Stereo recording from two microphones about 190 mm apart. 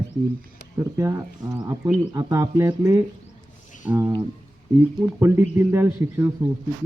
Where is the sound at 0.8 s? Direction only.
15° right (ahead or behind).